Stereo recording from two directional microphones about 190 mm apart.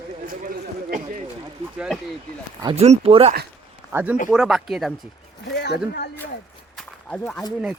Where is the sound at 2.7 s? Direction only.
35° right (ahead or behind).